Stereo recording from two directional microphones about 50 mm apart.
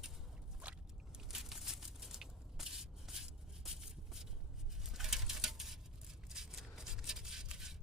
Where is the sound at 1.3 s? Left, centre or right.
Centre.